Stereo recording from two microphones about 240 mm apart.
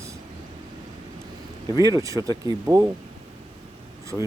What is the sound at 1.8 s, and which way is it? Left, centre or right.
Speech, centre.